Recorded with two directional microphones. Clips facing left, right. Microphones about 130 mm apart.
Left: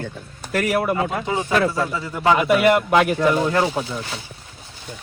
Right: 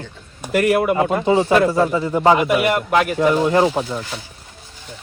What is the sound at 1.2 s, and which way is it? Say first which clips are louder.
Speech: right 8 dB; 30° right (ahead or behind).